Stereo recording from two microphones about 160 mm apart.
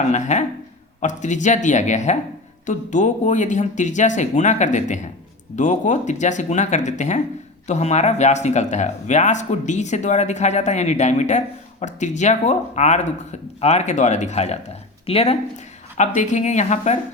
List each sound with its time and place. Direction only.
0.0 s speech: 45° left (ahead or behind)
16.0 s speech: 50° left (ahead or behind)